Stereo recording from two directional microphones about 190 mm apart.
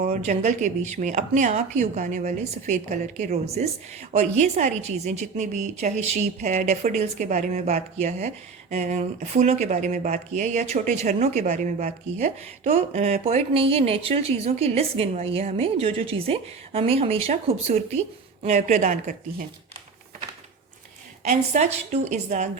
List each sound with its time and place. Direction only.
0.0 s speech: 40° right (ahead or behind)
21.2 s speech: 35° right (ahead or behind)